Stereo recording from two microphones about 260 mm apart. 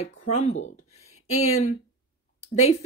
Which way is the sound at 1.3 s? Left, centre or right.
Left.